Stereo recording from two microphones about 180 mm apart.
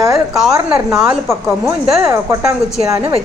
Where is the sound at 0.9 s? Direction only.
Centre (ahead or behind).